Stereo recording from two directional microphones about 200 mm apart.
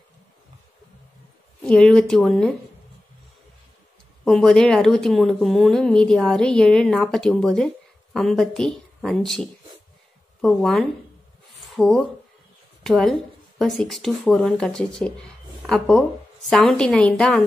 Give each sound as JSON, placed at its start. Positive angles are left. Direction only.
{"t": 1.6, "sound": "a woman's voice", "side_deg": 5}
{"t": 4.2, "sound": "a woman's voice", "side_deg": 0}